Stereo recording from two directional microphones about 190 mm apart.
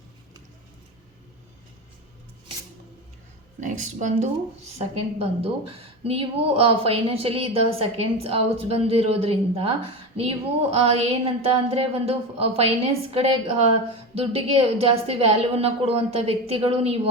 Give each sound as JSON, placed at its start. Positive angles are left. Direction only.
{"t": 3.6, "sound": "a woman's voice", "side_deg": -40}